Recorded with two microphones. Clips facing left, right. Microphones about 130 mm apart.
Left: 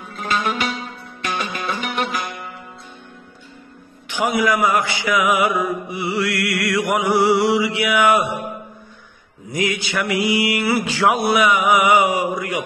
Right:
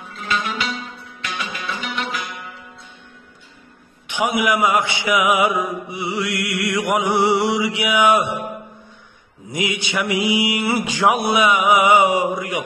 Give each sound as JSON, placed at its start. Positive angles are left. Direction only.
{"t": 0.1, "sound": "music", "side_deg": 45}
{"t": 4.1, "sound": "mantra", "side_deg": -20}
{"t": 9.5, "sound": "mantra", "side_deg": -20}